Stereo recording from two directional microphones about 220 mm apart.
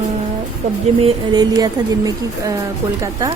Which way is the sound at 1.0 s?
20° right (ahead or behind).